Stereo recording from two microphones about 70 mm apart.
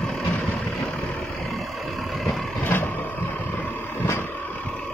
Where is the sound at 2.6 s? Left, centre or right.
Left.